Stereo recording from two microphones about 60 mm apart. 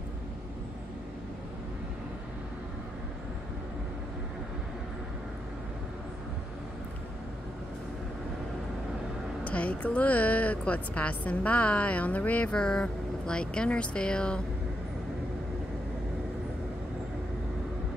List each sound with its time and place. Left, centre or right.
9.4 s a woman's voice: left